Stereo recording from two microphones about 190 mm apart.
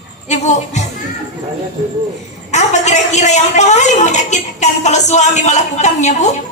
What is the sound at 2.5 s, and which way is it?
A woman's voice, 40° left (ahead or behind).